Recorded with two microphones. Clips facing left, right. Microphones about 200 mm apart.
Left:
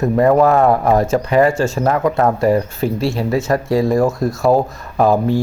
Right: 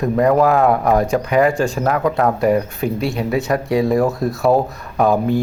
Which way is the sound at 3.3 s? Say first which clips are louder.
Left 1 dB; centre (ahead or behind).